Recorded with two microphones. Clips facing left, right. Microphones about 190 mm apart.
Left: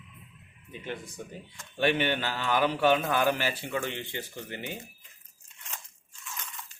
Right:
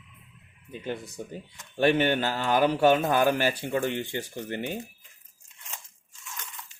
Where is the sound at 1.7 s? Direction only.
45° right (ahead or behind).